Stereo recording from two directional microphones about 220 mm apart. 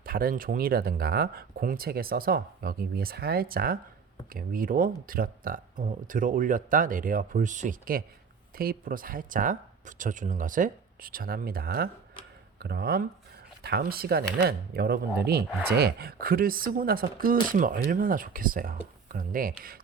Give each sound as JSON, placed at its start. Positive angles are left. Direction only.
{"t": 0.0, "sound": "speech", "side_deg": -40}